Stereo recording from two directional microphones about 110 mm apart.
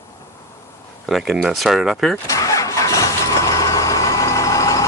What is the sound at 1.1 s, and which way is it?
Speech, centre (ahead or behind).